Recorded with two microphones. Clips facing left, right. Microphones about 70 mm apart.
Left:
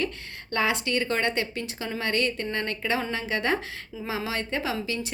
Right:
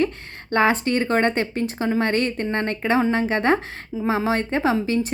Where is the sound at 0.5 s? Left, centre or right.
Right.